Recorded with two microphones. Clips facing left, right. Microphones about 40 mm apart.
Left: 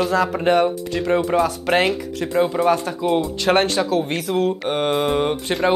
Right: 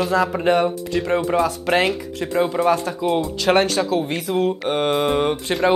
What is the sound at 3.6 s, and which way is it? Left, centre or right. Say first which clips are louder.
Speech: even; left.